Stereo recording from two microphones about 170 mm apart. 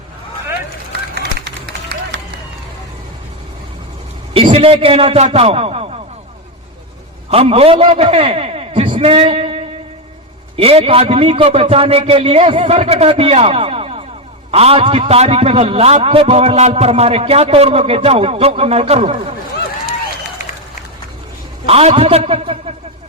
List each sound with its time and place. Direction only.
1.1 s run: 70° right (ahead or behind)
4.4 s a man's voice: 35° right (ahead or behind)
7.3 s a man's voice: 35° right (ahead or behind)
21.7 s a man's voice: 35° right (ahead or behind)